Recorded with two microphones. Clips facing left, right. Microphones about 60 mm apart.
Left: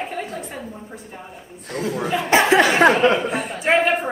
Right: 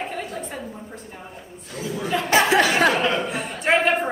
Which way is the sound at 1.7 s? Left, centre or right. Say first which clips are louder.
Left 5 dB; left.